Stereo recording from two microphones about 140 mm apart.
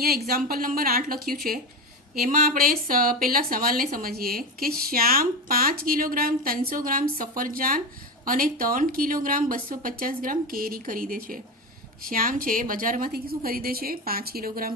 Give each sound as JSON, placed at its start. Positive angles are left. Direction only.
{"t": 0.3, "sound": "speech", "side_deg": -90}
{"t": 2.2, "sound": "speech", "side_deg": -70}